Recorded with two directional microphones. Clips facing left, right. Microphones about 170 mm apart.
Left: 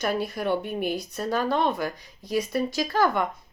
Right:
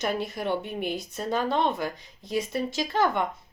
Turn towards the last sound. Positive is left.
turn(degrees=-25)  # may be behind; listen again after turning